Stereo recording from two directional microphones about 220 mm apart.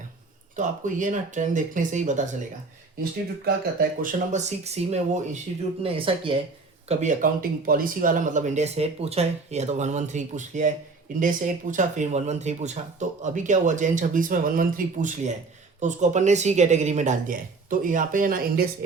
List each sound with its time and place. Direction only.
0.5 s speech: 35° right (ahead or behind)